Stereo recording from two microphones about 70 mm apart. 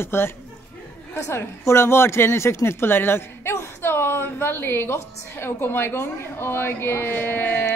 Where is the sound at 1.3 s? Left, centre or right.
Left.